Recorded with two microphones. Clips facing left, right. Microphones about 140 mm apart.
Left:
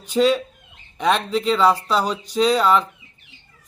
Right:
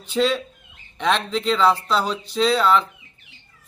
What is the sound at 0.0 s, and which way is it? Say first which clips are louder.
A man's voice: left 3 dB; 10° left (ahead or behind).